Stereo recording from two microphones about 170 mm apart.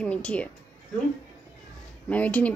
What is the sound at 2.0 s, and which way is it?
Speech, 10° left (ahead or behind).